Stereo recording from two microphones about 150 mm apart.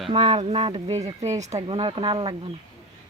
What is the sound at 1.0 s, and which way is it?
Speech, 20° right (ahead or behind).